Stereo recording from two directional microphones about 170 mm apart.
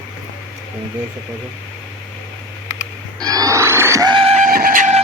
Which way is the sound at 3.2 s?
20° right (ahead or behind).